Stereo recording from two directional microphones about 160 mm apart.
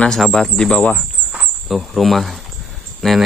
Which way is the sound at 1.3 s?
5° right (ahead or behind).